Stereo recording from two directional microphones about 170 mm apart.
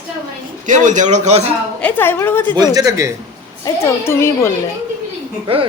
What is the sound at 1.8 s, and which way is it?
Speech, 10° left (ahead or behind).